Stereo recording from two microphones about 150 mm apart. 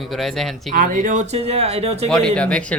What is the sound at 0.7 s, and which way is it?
Speech, 65° right (ahead or behind).